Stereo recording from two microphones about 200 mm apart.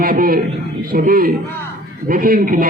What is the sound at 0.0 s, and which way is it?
A man's voice, 45° right (ahead or behind).